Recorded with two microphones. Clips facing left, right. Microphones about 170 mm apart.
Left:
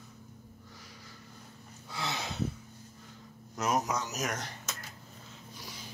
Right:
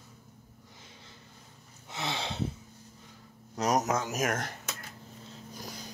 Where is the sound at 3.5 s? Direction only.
40° right (ahead or behind).